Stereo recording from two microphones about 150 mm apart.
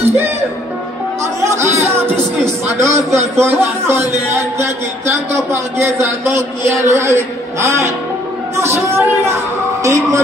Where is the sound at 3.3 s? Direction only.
15° right (ahead or behind).